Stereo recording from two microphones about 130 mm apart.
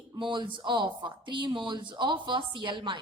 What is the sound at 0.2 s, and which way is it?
A woman's voice, 40° right (ahead or behind).